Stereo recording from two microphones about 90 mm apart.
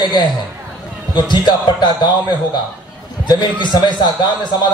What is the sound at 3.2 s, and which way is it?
Speech, 50° left (ahead or behind).